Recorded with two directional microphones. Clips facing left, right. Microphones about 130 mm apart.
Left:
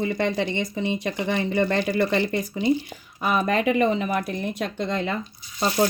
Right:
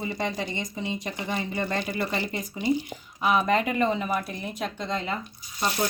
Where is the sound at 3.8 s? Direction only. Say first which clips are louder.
Left 3 dB; 65° left (ahead or behind).